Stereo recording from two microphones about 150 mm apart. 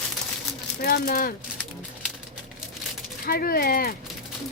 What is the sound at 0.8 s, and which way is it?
Speech, 90° left.